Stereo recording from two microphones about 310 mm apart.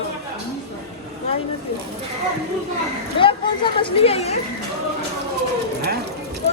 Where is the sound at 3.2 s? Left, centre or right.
Centre.